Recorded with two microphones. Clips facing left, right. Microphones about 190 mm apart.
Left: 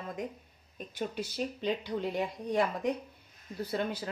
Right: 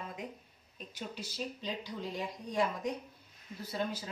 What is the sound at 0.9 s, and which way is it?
Speech, 60° left (ahead or behind).